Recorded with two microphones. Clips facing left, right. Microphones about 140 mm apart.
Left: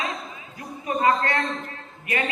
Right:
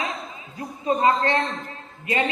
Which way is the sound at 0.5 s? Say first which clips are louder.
Right 4 dB; 25° right (ahead or behind).